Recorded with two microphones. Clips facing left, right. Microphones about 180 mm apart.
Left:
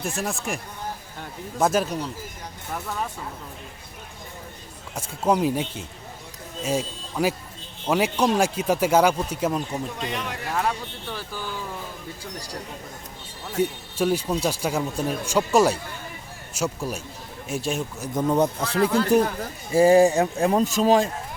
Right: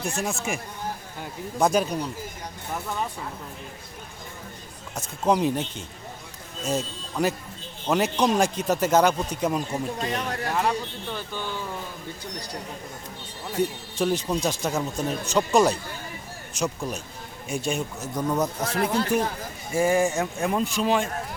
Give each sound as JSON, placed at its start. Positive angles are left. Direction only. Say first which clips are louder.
{"t": 0.0, "sound": "speech", "louder": "even", "side_deg": 0}
{"t": 4.9, "sound": "speech", "louder": "left 1 dB", "side_deg": 10}
{"t": 10.0, "sound": "speech", "louder": "right 2 dB", "side_deg": -40}
{"t": 10.5, "sound": "speech", "louder": "even", "side_deg": 0}
{"t": 13.6, "sound": "speech", "louder": "left 2 dB", "side_deg": 10}
{"t": 18.1, "sound": "speech", "louder": "left 5 dB", "side_deg": 25}